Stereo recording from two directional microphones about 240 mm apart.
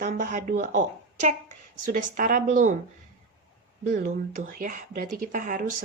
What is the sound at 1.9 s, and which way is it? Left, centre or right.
Speech, right.